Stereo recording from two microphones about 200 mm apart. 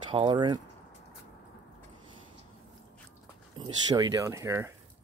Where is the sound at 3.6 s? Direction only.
20° right (ahead or behind).